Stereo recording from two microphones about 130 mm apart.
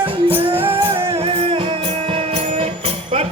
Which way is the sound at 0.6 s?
50° right (ahead or behind).